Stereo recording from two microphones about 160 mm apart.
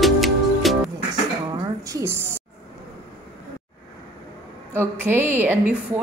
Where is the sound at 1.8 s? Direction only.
20° right (ahead or behind).